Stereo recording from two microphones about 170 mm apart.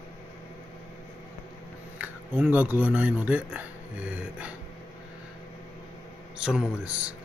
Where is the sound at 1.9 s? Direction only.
10° right (ahead or behind).